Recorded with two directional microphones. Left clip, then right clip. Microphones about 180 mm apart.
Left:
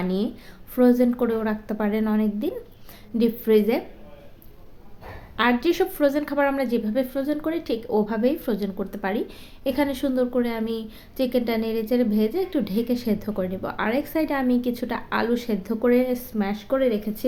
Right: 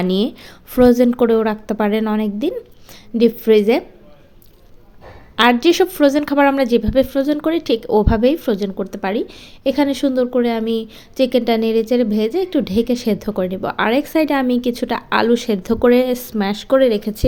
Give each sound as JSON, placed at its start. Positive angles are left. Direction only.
{"t": 0.0, "sound": "a woman's voice", "side_deg": -50}
{"t": 5.4, "sound": "a woman's voice", "side_deg": -45}